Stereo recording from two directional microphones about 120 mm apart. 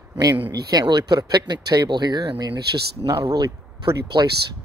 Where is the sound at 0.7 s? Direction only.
35° right (ahead or behind).